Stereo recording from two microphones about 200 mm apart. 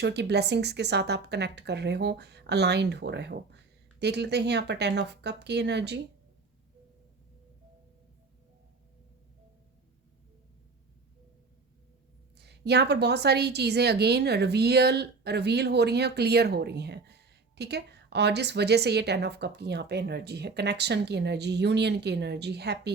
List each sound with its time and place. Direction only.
0.0 s a woman's voice: 55° right (ahead or behind)
12.4 s a woman's voice: 55° right (ahead or behind)